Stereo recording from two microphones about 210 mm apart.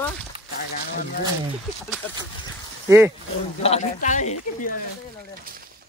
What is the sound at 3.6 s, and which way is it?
A man's voice, 30° left (ahead or behind).